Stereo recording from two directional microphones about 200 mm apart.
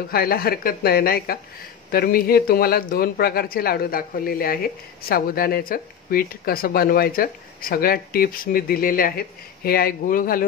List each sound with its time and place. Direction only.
0.1 s speech: 50° left (ahead or behind)